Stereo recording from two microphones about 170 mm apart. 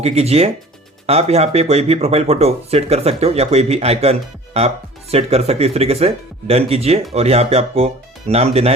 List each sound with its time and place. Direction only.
0.0 s speech: 35° right (ahead or behind)